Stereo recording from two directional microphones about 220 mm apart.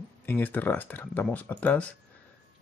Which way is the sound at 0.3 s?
10° left (ahead or behind).